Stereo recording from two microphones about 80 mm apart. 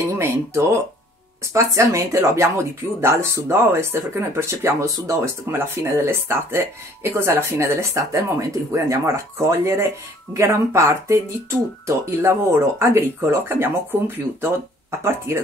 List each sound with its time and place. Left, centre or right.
0.1 s a sound: right
1.5 s speech: right
11.8 s speech: right